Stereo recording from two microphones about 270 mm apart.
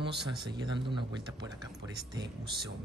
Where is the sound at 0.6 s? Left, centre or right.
Centre.